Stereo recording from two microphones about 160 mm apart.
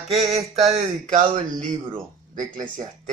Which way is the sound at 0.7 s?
50° right (ahead or behind).